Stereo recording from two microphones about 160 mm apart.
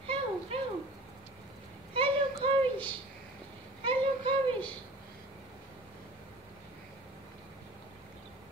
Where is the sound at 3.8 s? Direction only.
30° right (ahead or behind).